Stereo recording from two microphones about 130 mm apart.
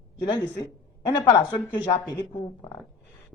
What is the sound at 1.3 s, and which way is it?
Speech, 35° left (ahead or behind).